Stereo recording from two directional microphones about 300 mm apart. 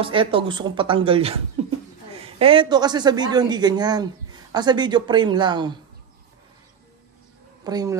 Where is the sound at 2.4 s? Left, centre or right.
Centre.